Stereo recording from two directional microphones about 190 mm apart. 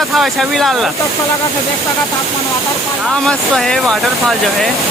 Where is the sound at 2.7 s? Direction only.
Centre (ahead or behind).